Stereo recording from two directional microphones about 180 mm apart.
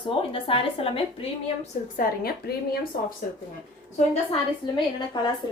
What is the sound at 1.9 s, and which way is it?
A woman's voice, 55° left (ahead or behind).